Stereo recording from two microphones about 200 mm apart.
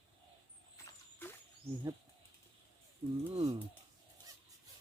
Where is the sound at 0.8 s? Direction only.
10° left (ahead or behind).